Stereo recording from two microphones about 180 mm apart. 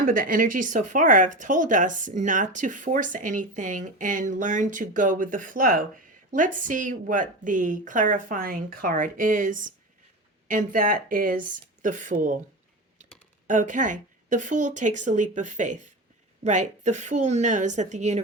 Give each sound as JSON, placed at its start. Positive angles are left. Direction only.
{"t": 0.0, "sound": "speech", "side_deg": -50}
{"t": 13.5, "sound": "a woman's voice", "side_deg": -45}